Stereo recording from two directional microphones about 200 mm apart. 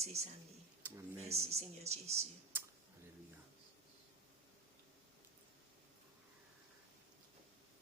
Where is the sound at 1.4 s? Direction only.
30° right (ahead or behind).